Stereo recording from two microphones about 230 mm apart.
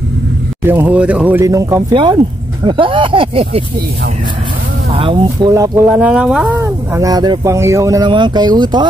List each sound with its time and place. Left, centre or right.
0.7 s speech: centre
4.9 s speech: right